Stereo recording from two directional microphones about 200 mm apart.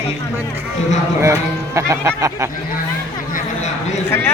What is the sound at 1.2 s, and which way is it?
Speech, 15° right (ahead or behind).